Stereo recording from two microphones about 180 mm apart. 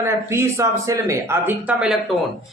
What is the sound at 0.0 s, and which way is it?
Speech, 15° right (ahead or behind).